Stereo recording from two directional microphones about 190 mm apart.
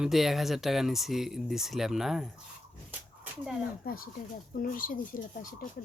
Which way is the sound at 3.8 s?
50° left (ahead or behind).